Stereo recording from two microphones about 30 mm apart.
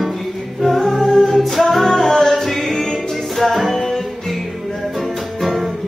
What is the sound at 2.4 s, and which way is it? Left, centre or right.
Music, centre.